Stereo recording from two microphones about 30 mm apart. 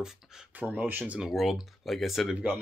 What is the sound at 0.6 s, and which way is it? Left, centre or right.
Speech, right.